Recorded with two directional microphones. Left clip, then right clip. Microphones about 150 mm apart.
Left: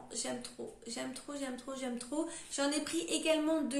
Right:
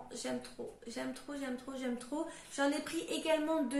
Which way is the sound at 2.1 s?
10° left (ahead or behind).